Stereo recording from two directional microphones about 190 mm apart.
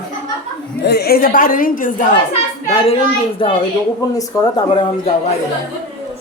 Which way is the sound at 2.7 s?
30° left (ahead or behind).